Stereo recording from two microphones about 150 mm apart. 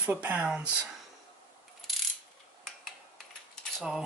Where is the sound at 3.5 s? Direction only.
5° right (ahead or behind).